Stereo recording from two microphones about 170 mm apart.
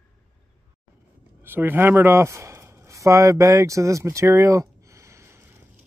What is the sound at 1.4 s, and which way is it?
A man's voice, 10° right (ahead or behind).